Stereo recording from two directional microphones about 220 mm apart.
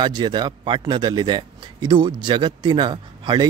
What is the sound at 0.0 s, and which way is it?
Speech, 20° right (ahead or behind).